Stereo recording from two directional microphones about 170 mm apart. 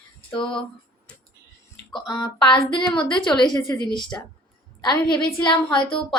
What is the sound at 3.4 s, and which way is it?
Speech, 25° left (ahead or behind).